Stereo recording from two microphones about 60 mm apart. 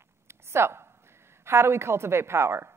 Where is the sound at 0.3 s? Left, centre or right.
Right.